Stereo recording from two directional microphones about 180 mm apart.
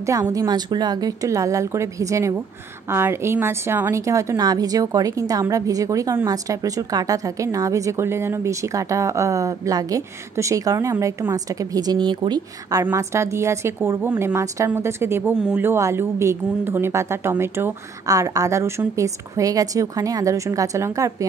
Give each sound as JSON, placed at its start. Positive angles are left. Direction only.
{"t": 0.0, "sound": "a woman's voice", "side_deg": -20}